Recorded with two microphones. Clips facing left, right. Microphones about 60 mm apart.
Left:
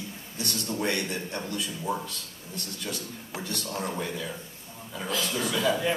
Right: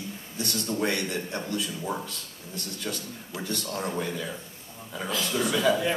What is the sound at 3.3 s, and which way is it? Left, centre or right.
Speech, left.